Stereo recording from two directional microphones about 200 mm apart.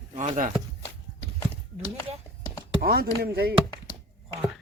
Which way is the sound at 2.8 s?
50° right (ahead or behind).